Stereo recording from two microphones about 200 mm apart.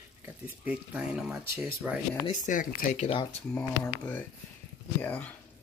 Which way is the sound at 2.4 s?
40° left (ahead or behind).